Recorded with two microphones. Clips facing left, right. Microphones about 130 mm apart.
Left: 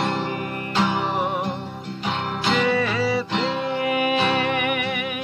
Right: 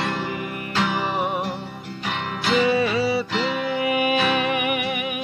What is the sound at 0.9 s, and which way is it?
Music, centre (ahead or behind).